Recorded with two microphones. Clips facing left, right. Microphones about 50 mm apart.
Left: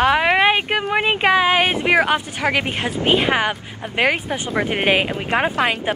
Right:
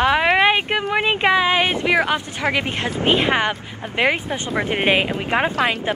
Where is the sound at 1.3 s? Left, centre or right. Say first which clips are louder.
Left 1 dB; left.